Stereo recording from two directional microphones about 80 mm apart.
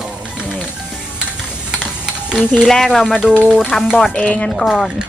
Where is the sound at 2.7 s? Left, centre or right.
Centre.